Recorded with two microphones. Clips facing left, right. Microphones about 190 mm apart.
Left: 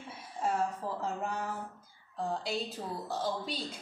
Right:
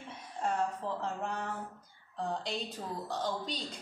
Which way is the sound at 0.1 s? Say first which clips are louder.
Left 1 dB; 5° left (ahead or behind).